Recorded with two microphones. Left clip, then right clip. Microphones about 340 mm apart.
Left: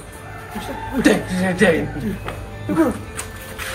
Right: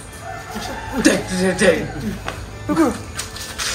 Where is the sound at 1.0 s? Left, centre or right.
Left.